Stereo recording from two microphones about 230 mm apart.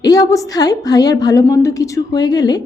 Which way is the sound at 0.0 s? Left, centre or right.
Centre.